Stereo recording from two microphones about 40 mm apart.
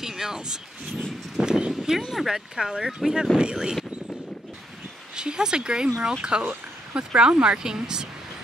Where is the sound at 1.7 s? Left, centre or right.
Centre.